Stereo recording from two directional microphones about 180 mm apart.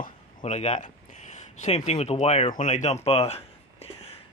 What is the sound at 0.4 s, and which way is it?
Speech, 35° left (ahead or behind).